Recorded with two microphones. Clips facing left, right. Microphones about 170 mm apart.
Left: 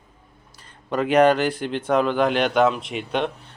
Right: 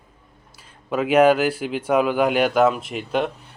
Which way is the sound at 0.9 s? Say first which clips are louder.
Right 1 dB; 5° right (ahead or behind).